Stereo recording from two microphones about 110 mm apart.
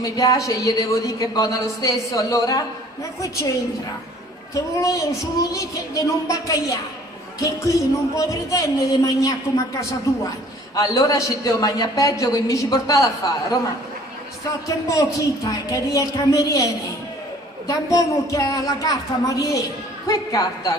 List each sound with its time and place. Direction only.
0.0 s speech: 35° left (ahead or behind)
4.6 s a woman's voice: 30° left (ahead or behind)
14.7 s a woman's voice: 30° left (ahead or behind)
17.6 s speech: 30° left (ahead or behind)